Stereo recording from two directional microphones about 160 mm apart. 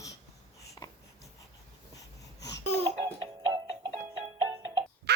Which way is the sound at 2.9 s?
35° right (ahead or behind).